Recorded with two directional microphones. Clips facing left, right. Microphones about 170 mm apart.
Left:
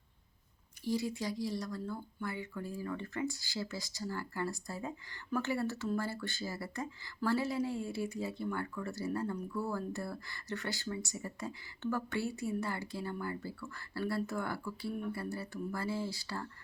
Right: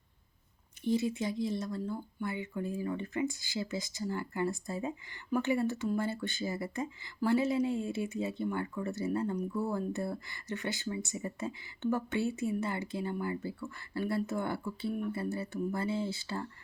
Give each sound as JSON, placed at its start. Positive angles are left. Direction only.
{"t": 0.9, "sound": "speech", "side_deg": -20}